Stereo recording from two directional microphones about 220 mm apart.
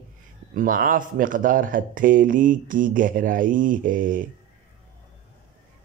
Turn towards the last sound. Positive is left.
turn(degrees=-40)  # may be behind; listen again after turning